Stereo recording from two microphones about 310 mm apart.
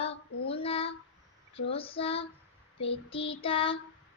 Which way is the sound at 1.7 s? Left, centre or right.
Centre.